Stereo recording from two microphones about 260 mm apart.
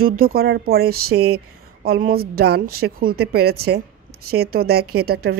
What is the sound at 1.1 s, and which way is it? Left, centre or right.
Speech, right.